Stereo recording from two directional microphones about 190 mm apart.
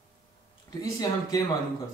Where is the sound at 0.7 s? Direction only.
20° left (ahead or behind).